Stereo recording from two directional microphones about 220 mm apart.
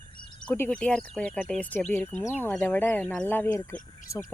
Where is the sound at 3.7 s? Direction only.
35° left (ahead or behind).